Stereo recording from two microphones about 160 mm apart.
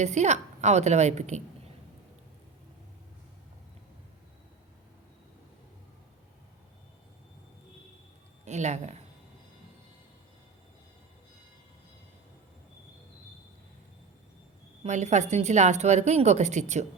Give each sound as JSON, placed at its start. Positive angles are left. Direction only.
{"t": 0.0, "sound": "a woman's voice", "side_deg": -45}
{"t": 8.4, "sound": "a woman's voice", "side_deg": -45}
{"t": 14.8, "sound": "a woman's voice", "side_deg": -45}